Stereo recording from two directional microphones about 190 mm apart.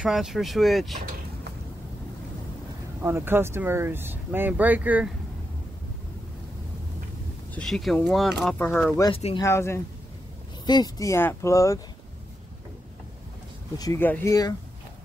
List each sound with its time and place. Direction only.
0.0 s speech: centre (ahead or behind)
3.0 s speech: 15° right (ahead or behind)
7.5 s speech: centre (ahead or behind)
9.0 s speech: 30° left (ahead or behind)
9.4 s speech: 15° left (ahead or behind)
13.7 s speech: 15° left (ahead or behind)